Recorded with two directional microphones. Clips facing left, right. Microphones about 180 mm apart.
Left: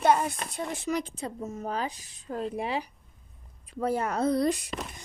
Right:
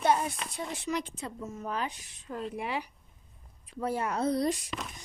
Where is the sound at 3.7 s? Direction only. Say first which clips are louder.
Left 3 dB; 45° left (ahead or behind).